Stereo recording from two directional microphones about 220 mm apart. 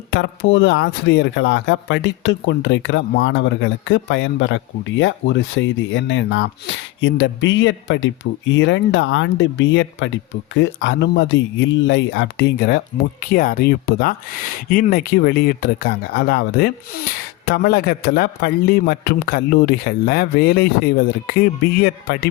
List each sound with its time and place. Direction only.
0.1 s a man's voice: 55° left (ahead or behind)